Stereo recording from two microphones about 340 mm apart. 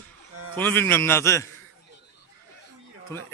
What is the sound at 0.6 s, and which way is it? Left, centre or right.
Speech, centre.